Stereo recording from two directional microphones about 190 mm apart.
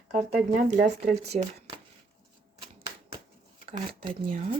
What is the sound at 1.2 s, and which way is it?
Speech, 35° right (ahead or behind).